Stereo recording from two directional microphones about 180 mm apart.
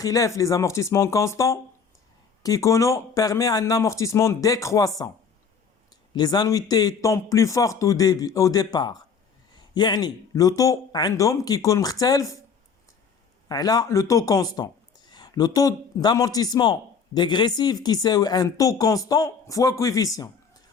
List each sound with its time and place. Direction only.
0.0 s a man's voice: 20° left (ahead or behind)
13.5 s a man's voice: 20° left (ahead or behind)
20.1 s a sound: 20° left (ahead or behind)